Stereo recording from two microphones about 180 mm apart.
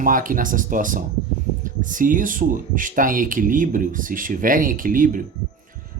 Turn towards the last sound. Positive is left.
turn(degrees=-50)  # may be behind; listen again after turning